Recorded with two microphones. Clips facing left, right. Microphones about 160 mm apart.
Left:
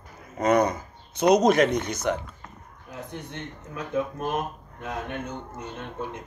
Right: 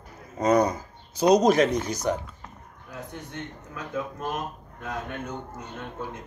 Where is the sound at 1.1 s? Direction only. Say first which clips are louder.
Even; 35° right (ahead or behind).